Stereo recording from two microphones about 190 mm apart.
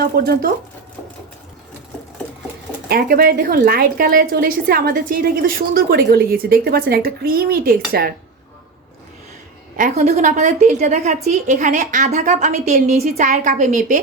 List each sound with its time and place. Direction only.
0.0 s speech: 55° right (ahead or behind)
2.9 s a woman's voice: 50° right (ahead or behind)
9.7 s a woman's voice: 45° right (ahead or behind)